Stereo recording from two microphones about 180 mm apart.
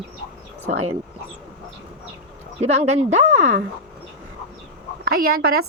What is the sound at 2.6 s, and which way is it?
Speech, 40° right (ahead or behind).